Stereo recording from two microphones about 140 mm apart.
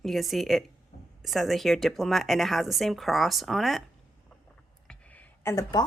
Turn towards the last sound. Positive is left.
turn(degrees=10)  # may be behind; listen again after turning